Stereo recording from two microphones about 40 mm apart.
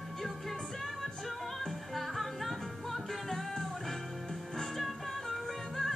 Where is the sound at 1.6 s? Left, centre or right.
Centre.